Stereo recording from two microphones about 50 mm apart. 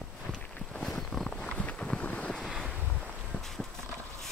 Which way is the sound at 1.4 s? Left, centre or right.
Left.